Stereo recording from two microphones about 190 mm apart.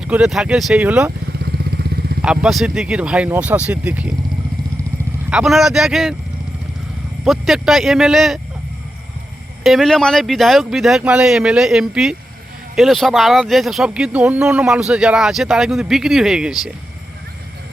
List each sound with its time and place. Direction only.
0.0 s speech: 5° right (ahead or behind)
1.4 s vehicle: 60° right (ahead or behind)
2.2 s speech: 5° right (ahead or behind)
5.3 s speech: 5° right (ahead or behind)
7.3 s speech: centre (ahead or behind)
9.6 s speech: centre (ahead or behind)